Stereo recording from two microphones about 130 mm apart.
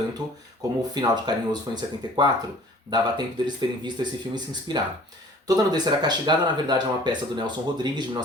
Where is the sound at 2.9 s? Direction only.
35° right (ahead or behind).